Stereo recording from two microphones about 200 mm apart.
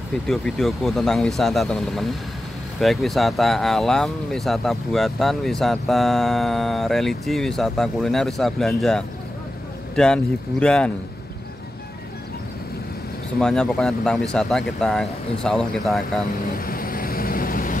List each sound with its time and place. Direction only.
0.3 s speech: centre (ahead or behind)
13.4 s speech: 5° left (ahead or behind)
16.5 s vehicle: 45° left (ahead or behind)